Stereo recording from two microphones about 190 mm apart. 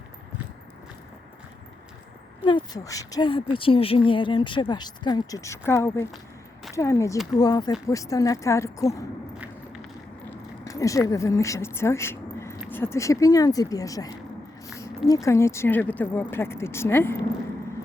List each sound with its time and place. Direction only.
2.4 s a woman's voice: 25° left (ahead or behind)
10.2 s speech: 15° left (ahead or behind)